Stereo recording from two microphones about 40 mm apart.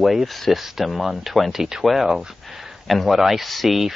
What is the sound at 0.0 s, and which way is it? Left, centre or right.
Speech, centre.